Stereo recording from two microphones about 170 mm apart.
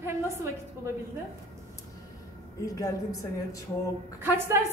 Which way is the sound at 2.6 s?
20° left (ahead or behind).